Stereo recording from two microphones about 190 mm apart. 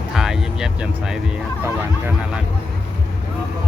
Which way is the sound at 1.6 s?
10° right (ahead or behind).